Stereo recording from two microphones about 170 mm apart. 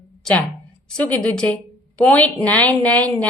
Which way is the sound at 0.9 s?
5° left (ahead or behind).